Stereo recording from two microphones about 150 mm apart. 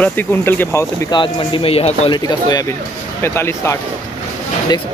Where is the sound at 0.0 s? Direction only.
10° left (ahead or behind).